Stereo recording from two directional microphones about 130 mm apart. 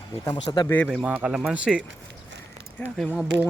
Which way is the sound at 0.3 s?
35° left (ahead or behind).